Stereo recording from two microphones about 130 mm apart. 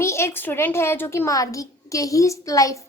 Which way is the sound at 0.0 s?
20° left (ahead or behind).